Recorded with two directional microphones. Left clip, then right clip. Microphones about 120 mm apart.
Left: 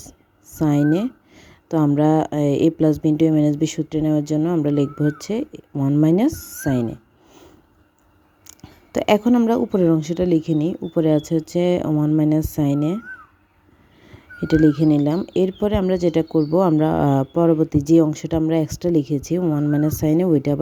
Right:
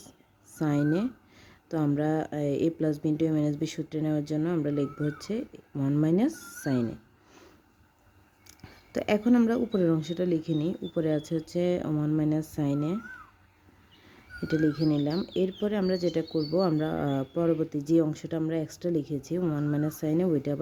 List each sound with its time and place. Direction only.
0.0 s a sound: 45° left (ahead or behind)
2.0 s speech: 40° left (ahead or behind)
8.4 s a sound: 35° left (ahead or behind)
9.5 s speech: 35° left (ahead or behind)
11.9 s speech: 15° left (ahead or behind)
12.1 s speech: 40° left (ahead or behind)
14.1 s speech: 40° left (ahead or behind)